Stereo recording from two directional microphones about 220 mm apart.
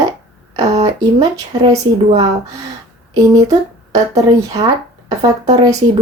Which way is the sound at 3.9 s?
15° right (ahead or behind).